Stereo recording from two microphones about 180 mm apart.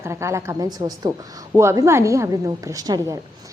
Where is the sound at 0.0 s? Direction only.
15° right (ahead or behind).